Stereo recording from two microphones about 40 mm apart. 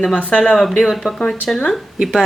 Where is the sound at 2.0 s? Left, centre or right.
Centre.